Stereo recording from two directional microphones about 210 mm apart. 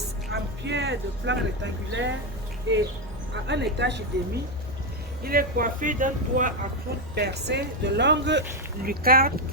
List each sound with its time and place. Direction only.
0.3 s speech: 55° right (ahead or behind)
5.2 s speech: 45° right (ahead or behind)
7.2 s speech: 50° right (ahead or behind)